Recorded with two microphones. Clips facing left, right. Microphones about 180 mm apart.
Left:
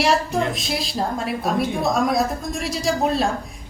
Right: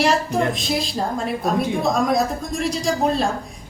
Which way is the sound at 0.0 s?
Centre (ahead or behind).